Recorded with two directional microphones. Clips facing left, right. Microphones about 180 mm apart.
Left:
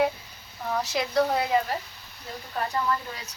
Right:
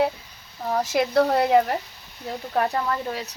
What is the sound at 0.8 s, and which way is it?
Speech, 55° right (ahead or behind).